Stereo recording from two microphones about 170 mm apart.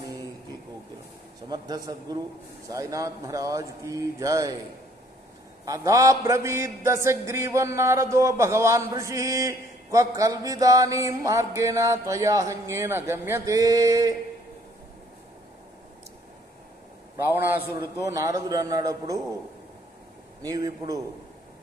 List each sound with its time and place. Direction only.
1.5 s a man's voice: 25° right (ahead or behind)
5.7 s a man's voice: 20° right (ahead or behind)
17.3 s a man's voice: 10° right (ahead or behind)
20.4 s a man's voice: 20° right (ahead or behind)